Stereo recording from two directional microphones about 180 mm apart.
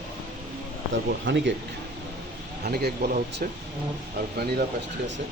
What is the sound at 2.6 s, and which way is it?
Speech, 60° right (ahead or behind).